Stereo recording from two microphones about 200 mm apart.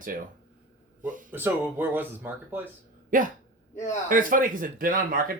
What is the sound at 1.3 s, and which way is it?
Speech, 10° right (ahead or behind).